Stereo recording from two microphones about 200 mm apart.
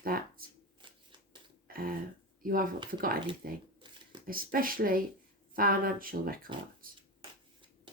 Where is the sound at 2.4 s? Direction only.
45° right (ahead or behind).